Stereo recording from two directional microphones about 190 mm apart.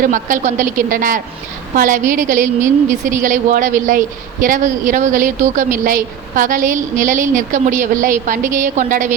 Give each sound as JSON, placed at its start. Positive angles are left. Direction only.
{"t": 0.0, "sound": "a woman's voice", "side_deg": -45}